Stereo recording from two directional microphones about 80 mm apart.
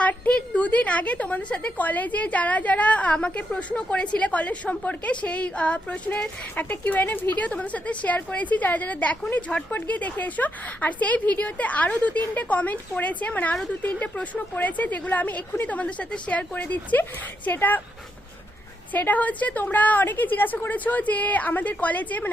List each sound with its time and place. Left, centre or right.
0.0 s a woman's voice: centre
18.9 s speech: left